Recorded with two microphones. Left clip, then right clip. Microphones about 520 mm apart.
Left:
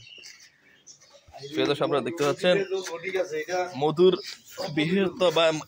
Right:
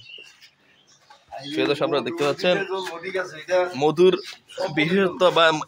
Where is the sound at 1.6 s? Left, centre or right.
Left.